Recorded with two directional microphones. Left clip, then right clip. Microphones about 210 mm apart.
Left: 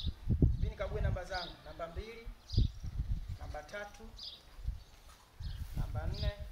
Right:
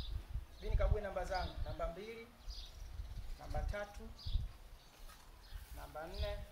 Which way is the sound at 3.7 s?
5° left (ahead or behind).